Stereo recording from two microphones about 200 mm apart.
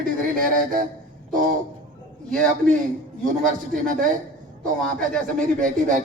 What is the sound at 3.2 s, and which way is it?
Speech, 40° right (ahead or behind).